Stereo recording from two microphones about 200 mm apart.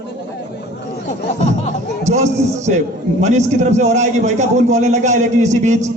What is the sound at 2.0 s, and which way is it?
A man's voice, 35° right (ahead or behind).